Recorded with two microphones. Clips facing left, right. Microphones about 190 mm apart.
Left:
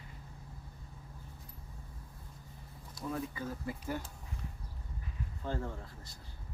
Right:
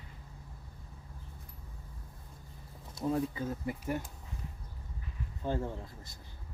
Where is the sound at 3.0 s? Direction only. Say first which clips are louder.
Right 6 dB; 25° right (ahead or behind).